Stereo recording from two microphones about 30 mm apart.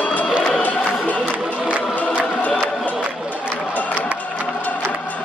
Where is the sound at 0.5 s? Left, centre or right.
Left.